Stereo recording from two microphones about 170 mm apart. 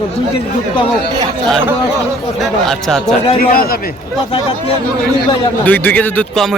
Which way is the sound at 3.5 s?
60° left (ahead or behind).